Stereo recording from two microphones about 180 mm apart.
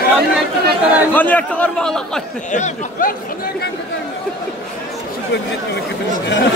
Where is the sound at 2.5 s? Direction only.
45° left (ahead or behind).